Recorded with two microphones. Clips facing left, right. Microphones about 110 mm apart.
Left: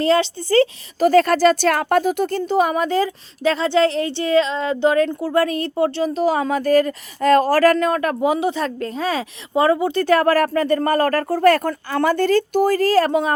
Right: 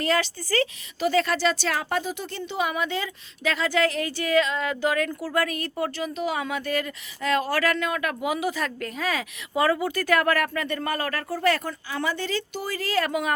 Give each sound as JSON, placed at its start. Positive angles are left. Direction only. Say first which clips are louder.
{"t": 0.0, "sound": "speech", "louder": "left 8 dB", "side_deg": 25}
{"t": 1.0, "sound": "speech", "louder": "left 9 dB", "side_deg": 50}